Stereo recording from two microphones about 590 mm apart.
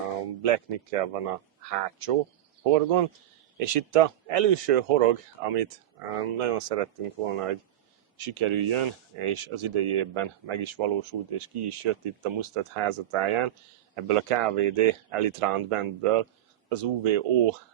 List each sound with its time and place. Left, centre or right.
0.4 s a man's voice: right